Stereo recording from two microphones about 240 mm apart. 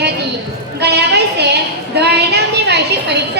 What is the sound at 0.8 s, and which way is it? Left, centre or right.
Speech, right.